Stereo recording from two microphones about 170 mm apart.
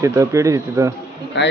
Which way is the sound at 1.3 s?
90° left.